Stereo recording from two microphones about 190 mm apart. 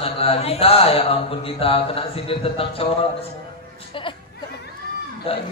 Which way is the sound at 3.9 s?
25° left (ahead or behind).